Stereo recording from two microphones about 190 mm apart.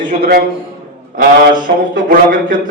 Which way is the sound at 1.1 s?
45° right (ahead or behind).